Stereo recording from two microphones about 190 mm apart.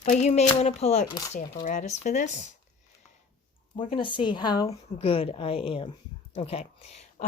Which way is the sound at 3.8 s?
25° left (ahead or behind).